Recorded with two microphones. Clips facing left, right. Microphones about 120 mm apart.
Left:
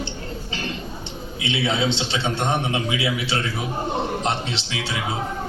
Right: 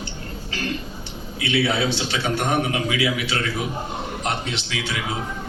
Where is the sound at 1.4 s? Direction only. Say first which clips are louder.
Right 2 dB; 20° left (ahead or behind).